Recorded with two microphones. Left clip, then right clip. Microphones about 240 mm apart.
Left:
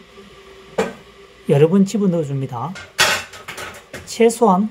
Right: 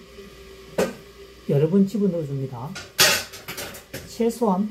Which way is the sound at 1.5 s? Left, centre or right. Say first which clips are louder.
Left 7 dB; left.